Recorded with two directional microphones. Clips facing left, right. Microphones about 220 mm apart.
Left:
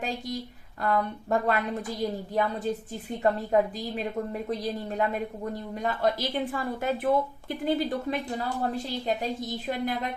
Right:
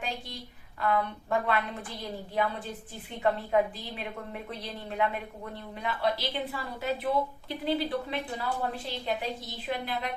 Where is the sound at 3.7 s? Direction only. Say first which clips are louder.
Left 8 dB; 40° left (ahead or behind).